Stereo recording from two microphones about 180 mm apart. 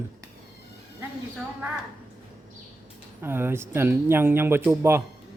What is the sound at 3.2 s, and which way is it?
Speech, 10° right (ahead or behind).